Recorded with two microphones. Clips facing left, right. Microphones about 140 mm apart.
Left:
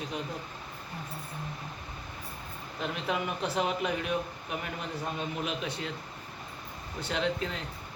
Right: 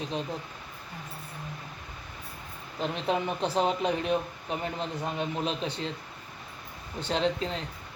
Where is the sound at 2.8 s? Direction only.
30° right (ahead or behind).